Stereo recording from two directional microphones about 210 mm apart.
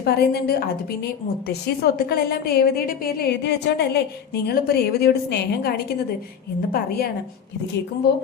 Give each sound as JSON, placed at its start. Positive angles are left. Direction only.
{"t": 0.0, "sound": "a woman's voice", "side_deg": 50}